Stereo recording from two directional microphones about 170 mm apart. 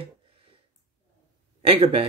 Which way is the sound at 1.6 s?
35° right (ahead or behind).